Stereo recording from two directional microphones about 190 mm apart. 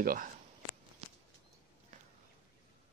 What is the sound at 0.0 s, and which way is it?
Speech, 50° right (ahead or behind).